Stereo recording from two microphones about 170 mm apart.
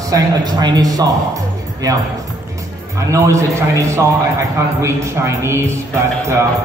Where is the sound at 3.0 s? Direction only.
15° right (ahead or behind).